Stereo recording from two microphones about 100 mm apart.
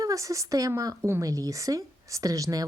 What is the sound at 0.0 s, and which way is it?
A woman's voice, 35° right (ahead or behind).